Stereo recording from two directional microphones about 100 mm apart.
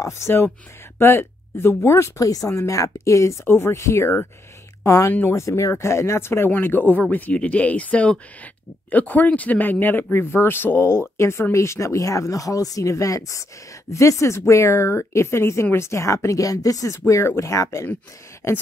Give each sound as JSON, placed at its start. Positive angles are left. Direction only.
{"t": 0.0, "sound": "speech", "side_deg": 25}